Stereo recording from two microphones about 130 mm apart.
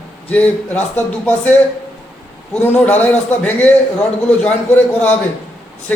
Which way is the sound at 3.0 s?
10° left (ahead or behind).